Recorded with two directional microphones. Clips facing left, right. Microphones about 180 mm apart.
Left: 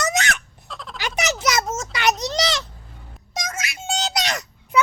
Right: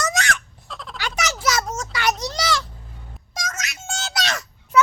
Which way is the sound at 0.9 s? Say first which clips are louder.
Left 3 dB; 20° left (ahead or behind).